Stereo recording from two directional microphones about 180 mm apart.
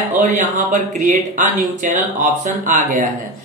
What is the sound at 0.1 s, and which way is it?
A man's voice, 45° right (ahead or behind).